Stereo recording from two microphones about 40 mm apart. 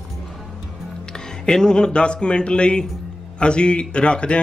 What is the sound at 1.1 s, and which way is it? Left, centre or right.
Speech, centre.